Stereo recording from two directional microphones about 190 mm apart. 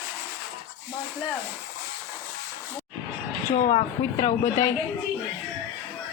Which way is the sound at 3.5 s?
40° left (ahead or behind).